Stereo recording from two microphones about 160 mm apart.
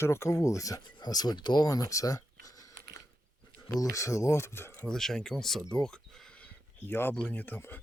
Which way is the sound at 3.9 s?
20° left (ahead or behind).